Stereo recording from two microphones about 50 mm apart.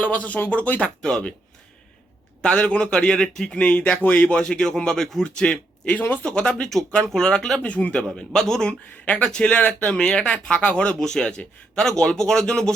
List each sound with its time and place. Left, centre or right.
0.0 s a man's voice: left
2.4 s a man's voice: left
3.6 s speech: left
4.3 s a man's voice: left
7.1 s a man's voice: centre
7.6 s a man's voice: left
8.1 s a man's voice: centre
9.0 s a man's voice: left
9.6 s speech: left
10.0 s a man's voice: centre
11.0 s a man's voice: centre